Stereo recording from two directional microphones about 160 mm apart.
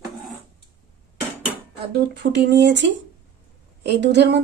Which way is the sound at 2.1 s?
90° right.